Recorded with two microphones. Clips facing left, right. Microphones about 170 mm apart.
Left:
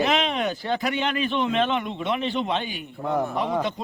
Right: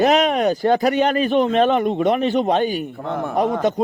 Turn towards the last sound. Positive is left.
turn(degrees=-45)  # may be behind; listen again after turning